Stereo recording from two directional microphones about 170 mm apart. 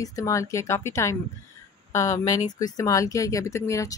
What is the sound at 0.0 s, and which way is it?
Speech, 20° left (ahead or behind).